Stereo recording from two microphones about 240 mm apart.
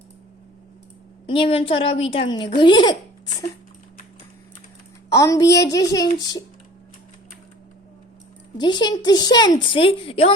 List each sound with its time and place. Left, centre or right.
1.3 s a woman's voice: left
5.1 s a woman's voice: centre
8.5 s a woman's voice: centre